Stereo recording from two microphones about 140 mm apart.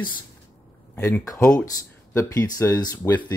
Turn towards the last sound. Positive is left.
turn(degrees=25)  # may be behind; listen again after turning